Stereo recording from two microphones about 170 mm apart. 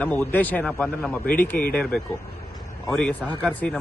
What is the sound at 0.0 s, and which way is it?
A man's voice, 10° left (ahead or behind).